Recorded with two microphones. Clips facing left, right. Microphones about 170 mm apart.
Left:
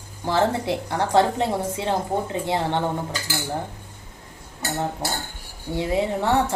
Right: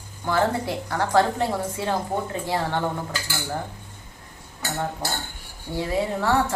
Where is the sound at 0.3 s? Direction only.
25° left (ahead or behind).